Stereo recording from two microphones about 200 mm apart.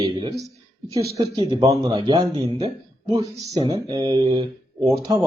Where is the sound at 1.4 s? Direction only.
30° right (ahead or behind).